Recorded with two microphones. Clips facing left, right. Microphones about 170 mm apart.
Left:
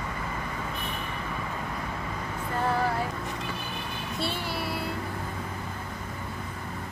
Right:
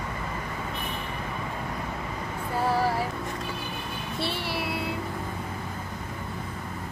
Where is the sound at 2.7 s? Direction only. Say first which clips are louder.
Right 2 dB; 5° right (ahead or behind).